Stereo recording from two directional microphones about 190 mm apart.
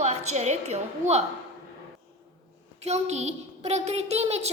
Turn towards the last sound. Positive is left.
turn(degrees=-35)  # may be behind; listen again after turning